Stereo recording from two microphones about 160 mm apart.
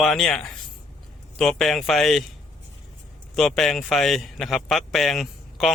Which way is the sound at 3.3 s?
Centre (ahead or behind).